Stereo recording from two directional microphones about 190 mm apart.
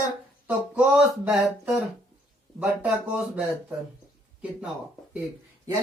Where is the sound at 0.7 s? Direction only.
5° right (ahead or behind).